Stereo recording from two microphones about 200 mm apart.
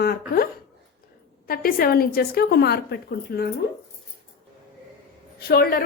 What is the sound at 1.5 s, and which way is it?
A woman's voice, 45° left (ahead or behind).